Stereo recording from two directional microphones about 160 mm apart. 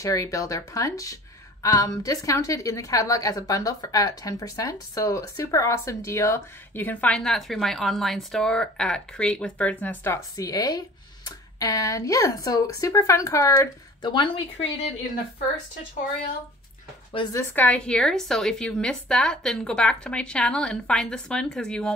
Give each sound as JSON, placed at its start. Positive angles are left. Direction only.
{"t": 0.0, "sound": "a woman's voice", "side_deg": 20}
{"t": 14.0, "sound": "speech", "side_deg": 30}
{"t": 17.3, "sound": "a woman's voice", "side_deg": 15}